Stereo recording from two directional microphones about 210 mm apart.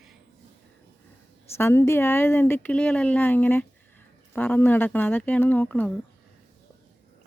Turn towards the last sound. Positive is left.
turn(degrees=10)  # may be behind; listen again after turning